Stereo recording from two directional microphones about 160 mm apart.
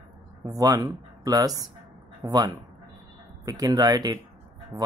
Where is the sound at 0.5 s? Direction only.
25° right (ahead or behind).